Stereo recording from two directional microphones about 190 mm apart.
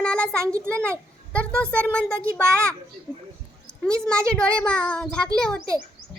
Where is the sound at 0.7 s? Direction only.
5° left (ahead or behind).